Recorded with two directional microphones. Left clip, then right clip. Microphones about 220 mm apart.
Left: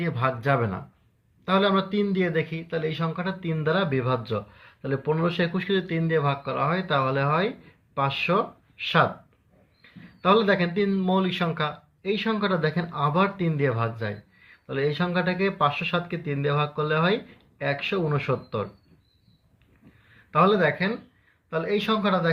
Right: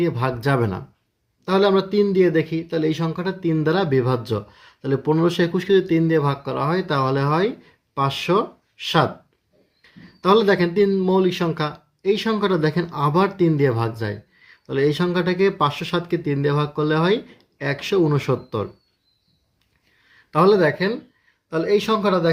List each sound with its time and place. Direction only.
0.0 s speech: 40° right (ahead or behind)
20.3 s speech: 45° right (ahead or behind)